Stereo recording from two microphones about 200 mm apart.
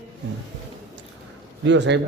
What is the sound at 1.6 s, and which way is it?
Speech, 60° right (ahead or behind).